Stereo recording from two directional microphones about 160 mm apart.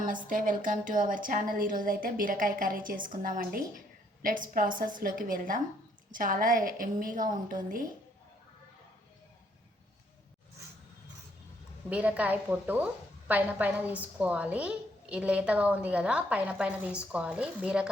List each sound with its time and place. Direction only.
0.3 s a woman's voice: 55° right (ahead or behind)
11.9 s a woman's voice: 10° right (ahead or behind)